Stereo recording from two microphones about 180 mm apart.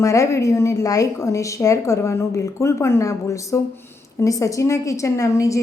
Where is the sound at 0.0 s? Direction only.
15° left (ahead or behind).